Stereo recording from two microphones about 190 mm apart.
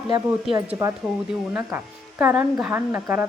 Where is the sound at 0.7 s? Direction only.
15° right (ahead or behind).